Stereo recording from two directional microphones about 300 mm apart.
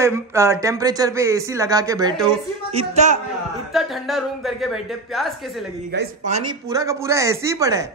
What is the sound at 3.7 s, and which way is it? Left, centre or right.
Speech, centre.